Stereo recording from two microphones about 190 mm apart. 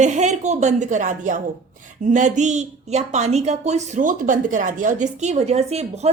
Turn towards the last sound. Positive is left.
turn(degrees=-35)  # may be behind; listen again after turning